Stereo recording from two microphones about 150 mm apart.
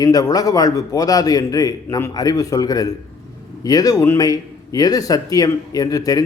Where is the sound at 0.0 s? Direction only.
25° left (ahead or behind).